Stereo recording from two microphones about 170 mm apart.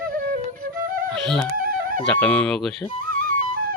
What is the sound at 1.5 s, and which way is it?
Music, 55° right (ahead or behind).